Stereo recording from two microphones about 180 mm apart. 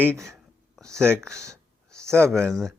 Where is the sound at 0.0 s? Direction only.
5° left (ahead or behind).